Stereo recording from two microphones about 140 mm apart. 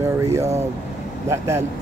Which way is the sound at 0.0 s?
20° right (ahead or behind).